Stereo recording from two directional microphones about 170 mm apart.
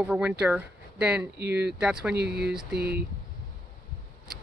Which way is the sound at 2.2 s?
75° right (ahead or behind).